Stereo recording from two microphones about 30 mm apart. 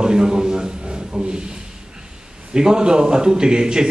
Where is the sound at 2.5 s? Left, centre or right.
Right.